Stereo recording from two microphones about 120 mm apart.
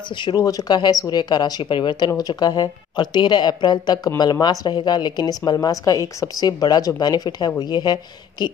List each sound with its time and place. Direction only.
0.1 s a woman's voice: 40° left (ahead or behind)